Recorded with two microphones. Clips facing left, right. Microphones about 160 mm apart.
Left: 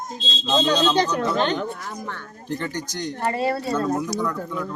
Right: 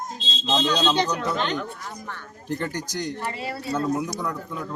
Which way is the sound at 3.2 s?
45° left (ahead or behind).